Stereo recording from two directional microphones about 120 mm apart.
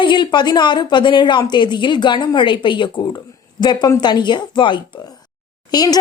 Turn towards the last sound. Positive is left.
turn(degrees=35)  # may be behind; listen again after turning